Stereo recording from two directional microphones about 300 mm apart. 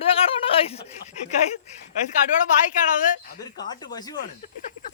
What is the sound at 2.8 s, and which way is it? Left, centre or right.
Speech, left.